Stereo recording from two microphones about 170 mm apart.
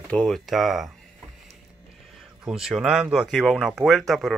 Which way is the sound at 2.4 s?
5° right (ahead or behind).